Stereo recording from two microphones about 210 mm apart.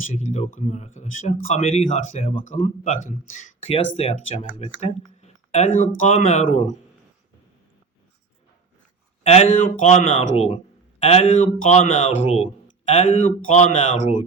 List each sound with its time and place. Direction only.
0.1 s speech: 35° left (ahead or behind)
9.2 s speech: 30° left (ahead or behind)